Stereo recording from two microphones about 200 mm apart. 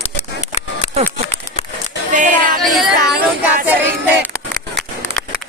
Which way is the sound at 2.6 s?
Centre (ahead or behind).